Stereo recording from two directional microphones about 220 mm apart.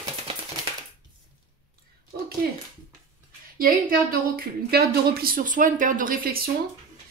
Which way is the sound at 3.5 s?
40° right (ahead or behind).